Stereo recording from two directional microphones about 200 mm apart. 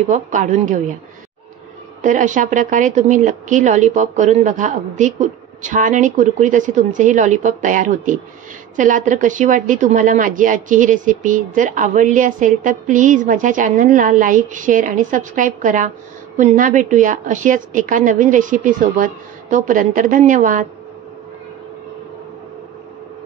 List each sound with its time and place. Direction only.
0.1 s a woman's voice: 40° right (ahead or behind)
2.0 s a woman's voice: 40° right (ahead or behind)